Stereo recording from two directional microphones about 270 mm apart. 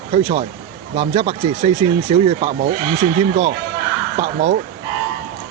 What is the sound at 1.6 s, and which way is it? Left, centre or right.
Speech, right.